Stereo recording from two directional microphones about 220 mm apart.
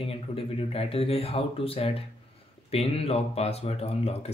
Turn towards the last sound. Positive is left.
turn(degrees=30)  # may be behind; listen again after turning